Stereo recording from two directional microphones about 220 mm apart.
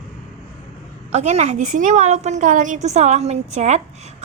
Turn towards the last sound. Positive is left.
turn(degrees=-30)  # may be behind; listen again after turning